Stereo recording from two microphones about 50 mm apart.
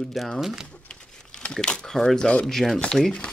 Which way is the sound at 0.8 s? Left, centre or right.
Centre.